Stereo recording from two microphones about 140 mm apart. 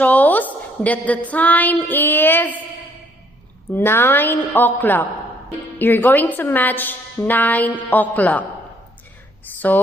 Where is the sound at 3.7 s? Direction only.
15° left (ahead or behind).